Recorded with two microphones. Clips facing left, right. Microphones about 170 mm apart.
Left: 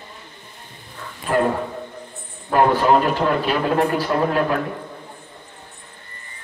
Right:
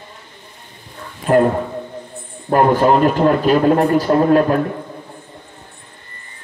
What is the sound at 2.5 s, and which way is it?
A man's voice, 45° right (ahead or behind).